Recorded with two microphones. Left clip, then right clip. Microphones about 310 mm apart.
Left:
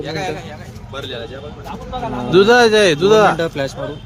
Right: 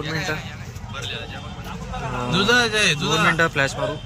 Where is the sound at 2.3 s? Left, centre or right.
Centre.